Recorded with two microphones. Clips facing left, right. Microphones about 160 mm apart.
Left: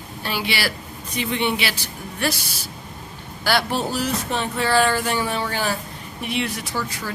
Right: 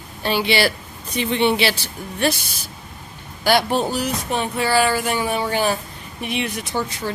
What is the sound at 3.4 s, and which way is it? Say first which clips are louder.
Speech: right 4 dB; 15° right (ahead or behind).